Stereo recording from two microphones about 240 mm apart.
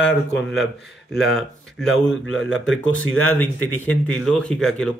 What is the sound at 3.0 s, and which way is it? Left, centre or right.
Speech, left.